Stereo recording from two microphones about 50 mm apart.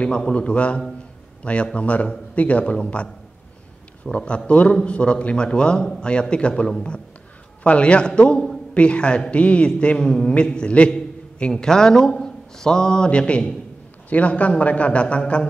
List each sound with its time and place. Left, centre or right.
0.0 s a man's voice: centre